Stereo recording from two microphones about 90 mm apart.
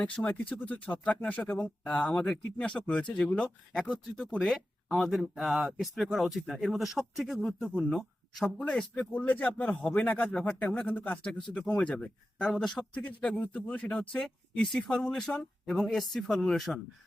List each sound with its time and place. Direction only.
0.0 s speech: 15° left (ahead or behind); by 8.4 s centre (ahead or behind)
8.6 s speech: 10° left (ahead or behind)